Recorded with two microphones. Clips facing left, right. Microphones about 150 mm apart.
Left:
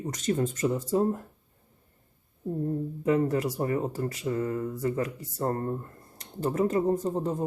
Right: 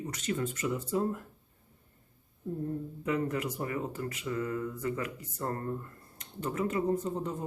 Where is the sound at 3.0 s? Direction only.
35° left (ahead or behind).